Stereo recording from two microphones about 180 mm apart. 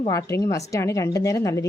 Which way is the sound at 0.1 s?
15° left (ahead or behind).